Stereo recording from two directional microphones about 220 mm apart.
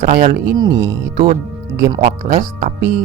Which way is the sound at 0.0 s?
30° right (ahead or behind).